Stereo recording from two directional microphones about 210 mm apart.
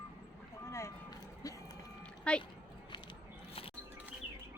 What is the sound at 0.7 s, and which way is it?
Vehicle, 15° left (ahead or behind).